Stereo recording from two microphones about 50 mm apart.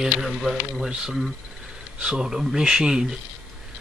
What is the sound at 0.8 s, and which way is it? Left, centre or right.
Speech, centre.